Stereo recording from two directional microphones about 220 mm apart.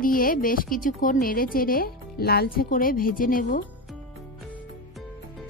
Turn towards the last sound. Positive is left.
turn(degrees=40)  # may be behind; listen again after turning